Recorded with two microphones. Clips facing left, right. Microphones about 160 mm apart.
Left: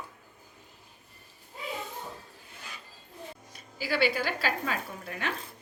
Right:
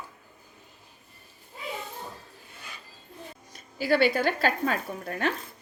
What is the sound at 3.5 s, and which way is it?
Speech, 50° right (ahead or behind).